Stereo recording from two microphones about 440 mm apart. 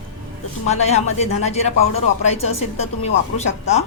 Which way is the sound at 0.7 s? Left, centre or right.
Centre.